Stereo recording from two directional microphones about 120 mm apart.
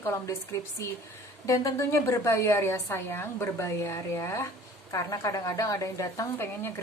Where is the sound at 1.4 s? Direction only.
25° left (ahead or behind).